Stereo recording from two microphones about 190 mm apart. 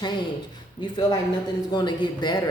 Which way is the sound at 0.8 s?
20° left (ahead or behind).